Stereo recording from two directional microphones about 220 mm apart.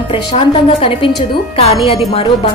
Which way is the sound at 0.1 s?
25° left (ahead or behind).